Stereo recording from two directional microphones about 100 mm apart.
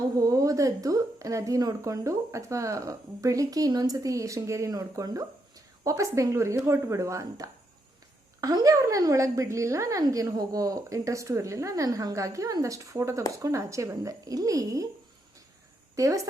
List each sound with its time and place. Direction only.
0.2 s a woman's voice: 35° right (ahead or behind)
16.0 s a woman's voice: 35° right (ahead or behind)